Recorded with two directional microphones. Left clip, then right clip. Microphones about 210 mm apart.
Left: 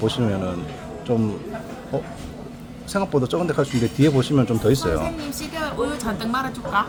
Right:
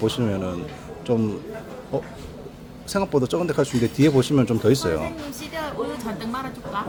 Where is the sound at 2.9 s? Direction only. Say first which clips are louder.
Even; centre (ahead or behind).